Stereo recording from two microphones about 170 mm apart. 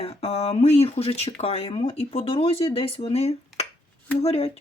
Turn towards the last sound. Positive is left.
turn(degrees=35)  # may be behind; listen again after turning